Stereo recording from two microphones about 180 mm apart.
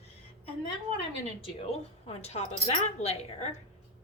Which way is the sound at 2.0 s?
35° left (ahead or behind).